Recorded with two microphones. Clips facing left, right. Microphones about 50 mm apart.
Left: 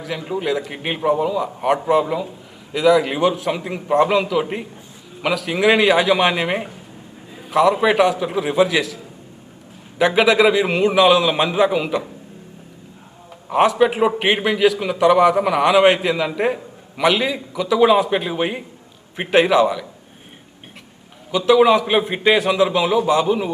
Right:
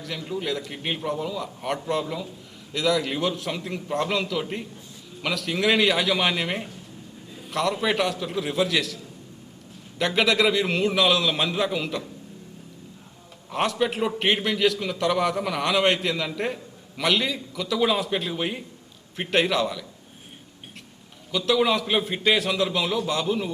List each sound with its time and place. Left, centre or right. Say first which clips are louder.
0.2 s a man's voice: left 6 dB; left
0.4 s a man's voice: left 9 dB; centre
0.7 s a man's voice: left 9 dB; left
10.0 s a man's voice: left 7 dB; centre
13.5 s a man's voice: left 9 dB; centre
21.3 s a man's voice: left 9 dB; centre